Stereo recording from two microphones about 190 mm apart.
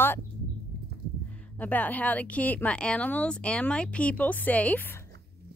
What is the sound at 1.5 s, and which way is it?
Speech, 10° left (ahead or behind).